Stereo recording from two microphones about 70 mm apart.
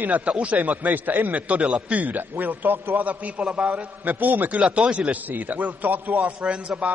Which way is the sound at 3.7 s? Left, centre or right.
Right.